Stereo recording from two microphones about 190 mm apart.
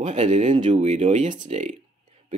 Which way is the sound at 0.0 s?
35° right (ahead or behind).